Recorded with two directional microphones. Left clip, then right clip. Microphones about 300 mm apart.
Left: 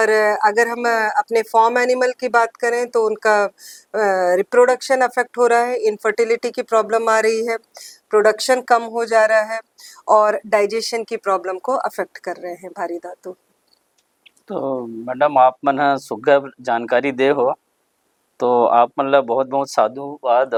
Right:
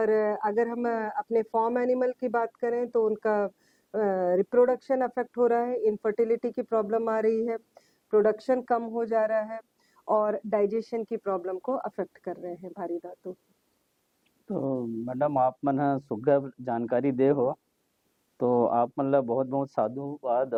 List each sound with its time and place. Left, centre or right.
0.0 s speech: centre
3.0 s speech: centre
3.2 s speech: centre
10.0 s speech: centre
11.9 s speech: centre
14.6 s speech: centre
19.9 s speech: left
20.2 s speech: centre